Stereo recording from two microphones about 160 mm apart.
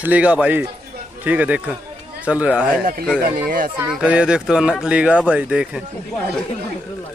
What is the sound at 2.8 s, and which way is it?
Speech, 65° right (ahead or behind).